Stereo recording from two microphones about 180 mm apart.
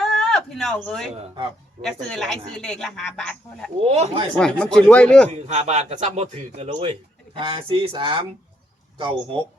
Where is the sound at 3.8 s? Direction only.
35° right (ahead or behind).